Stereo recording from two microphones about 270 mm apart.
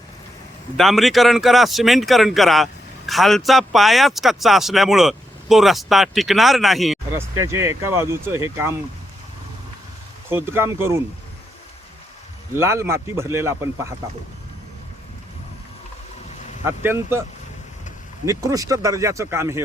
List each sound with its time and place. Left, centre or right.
0.8 s speech: centre
10.2 s speech: centre
12.5 s speech: centre
16.6 s speech: centre
18.3 s speech: centre